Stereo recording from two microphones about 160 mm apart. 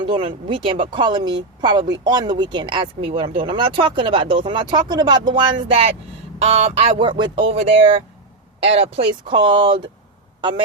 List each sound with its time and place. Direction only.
0.3 s speech: 30° right (ahead or behind)